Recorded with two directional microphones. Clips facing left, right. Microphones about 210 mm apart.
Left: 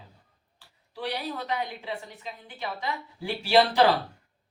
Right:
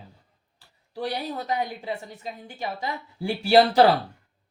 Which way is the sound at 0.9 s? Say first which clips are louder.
Right 3 dB; 45° right (ahead or behind).